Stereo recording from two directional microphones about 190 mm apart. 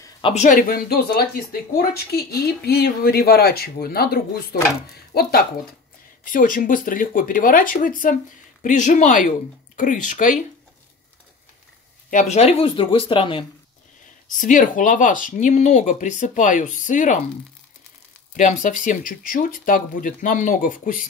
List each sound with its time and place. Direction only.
0.3 s speech: 40° left (ahead or behind)
12.1 s speech: 40° left (ahead or behind)
14.4 s speech: 45° left (ahead or behind)
18.3 s speech: 40° left (ahead or behind)